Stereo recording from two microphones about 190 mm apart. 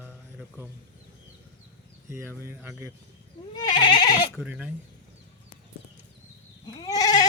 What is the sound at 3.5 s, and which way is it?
Goat, 25° left (ahead or behind).